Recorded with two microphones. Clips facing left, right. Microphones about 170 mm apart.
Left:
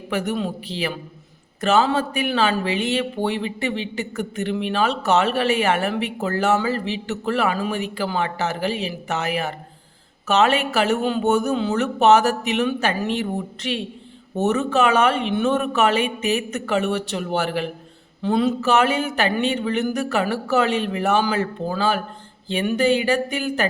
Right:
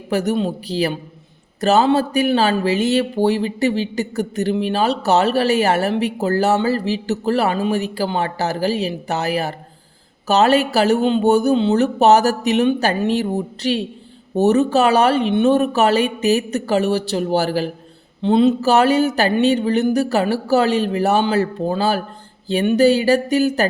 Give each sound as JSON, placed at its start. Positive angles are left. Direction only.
{"t": 0.1, "sound": "speech", "side_deg": -40}
{"t": 18.2, "sound": "speech", "side_deg": -25}